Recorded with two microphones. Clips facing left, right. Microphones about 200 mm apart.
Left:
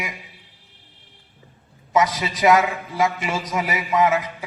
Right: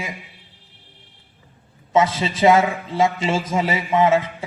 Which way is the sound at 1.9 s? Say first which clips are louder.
Right 2 dB; 25° right (ahead or behind).